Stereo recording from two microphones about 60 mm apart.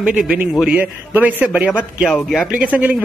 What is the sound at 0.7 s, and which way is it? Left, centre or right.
A man's voice, right.